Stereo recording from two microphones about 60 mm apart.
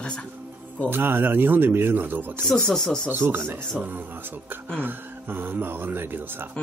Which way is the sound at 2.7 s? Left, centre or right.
Centre.